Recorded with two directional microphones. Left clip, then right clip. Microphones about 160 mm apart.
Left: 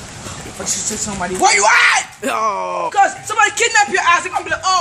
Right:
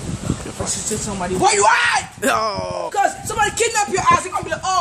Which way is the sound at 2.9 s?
Centre (ahead or behind).